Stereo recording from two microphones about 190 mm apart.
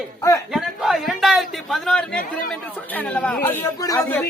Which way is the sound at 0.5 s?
Centre (ahead or behind).